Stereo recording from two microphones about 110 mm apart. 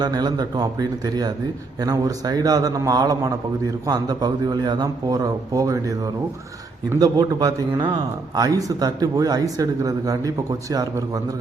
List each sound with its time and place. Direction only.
0.0 s speech: 40° right (ahead or behind)
7.0 s speech: 35° right (ahead or behind)